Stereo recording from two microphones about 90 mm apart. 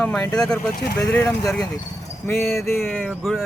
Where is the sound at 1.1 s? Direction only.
25° left (ahead or behind).